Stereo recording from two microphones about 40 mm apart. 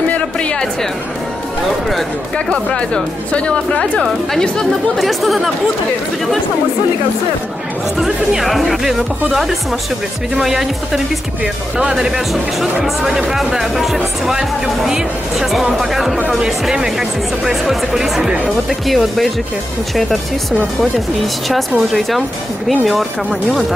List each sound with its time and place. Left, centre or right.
0.1 s a sound: left
2.3 s speech: left
4.9 s speech: centre
8.0 s speech: centre
12.8 s speech: centre
20.9 s speech: centre